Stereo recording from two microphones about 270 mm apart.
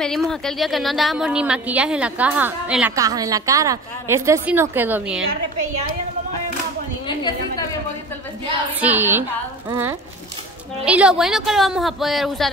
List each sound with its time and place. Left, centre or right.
0.0 s a woman's voice: centre
7.1 s a sound: centre
8.8 s a woman's voice: centre